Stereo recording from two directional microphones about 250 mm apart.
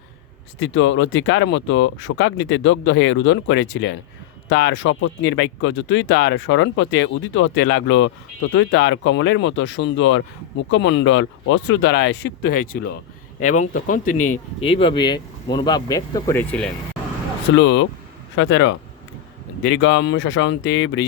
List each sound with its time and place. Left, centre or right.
0.7 s speech: left
13.4 s speech: left; by 16.7 s centre
17.6 s speech: left